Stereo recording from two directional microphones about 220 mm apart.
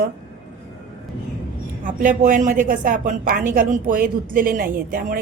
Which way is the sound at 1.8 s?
35° right (ahead or behind).